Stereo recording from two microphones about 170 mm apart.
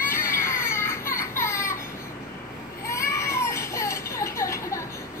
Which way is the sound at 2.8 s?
15° left (ahead or behind).